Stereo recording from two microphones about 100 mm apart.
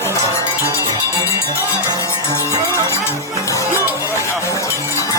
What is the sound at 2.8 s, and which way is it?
Music, 25° left (ahead or behind).